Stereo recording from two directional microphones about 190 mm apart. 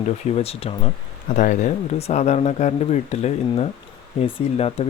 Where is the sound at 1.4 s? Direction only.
40° left (ahead or behind).